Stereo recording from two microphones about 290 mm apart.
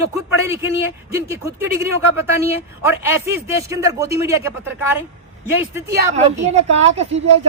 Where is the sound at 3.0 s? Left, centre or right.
Centre.